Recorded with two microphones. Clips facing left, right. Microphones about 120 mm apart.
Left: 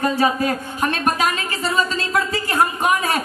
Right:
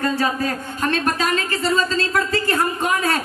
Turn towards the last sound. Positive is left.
turn(degrees=15)  # may be behind; listen again after turning